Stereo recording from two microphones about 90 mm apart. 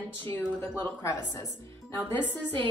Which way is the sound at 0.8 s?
35° left (ahead or behind).